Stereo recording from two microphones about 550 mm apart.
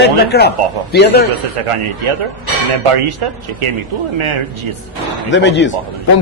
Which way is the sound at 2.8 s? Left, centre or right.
Right.